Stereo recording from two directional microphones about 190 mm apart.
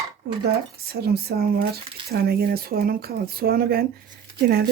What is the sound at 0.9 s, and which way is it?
Speech, 55° right (ahead or behind).